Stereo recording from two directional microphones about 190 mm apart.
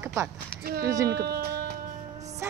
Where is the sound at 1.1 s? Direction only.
55° right (ahead or behind).